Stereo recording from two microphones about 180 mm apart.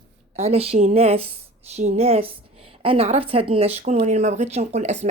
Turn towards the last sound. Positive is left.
turn(degrees=-40)  # may be behind; listen again after turning